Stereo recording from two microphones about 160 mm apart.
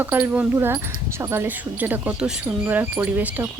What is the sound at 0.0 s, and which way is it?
Speech, 10° right (ahead or behind).